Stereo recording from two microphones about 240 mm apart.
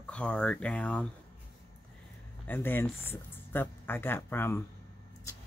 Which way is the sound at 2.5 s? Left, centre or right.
Centre.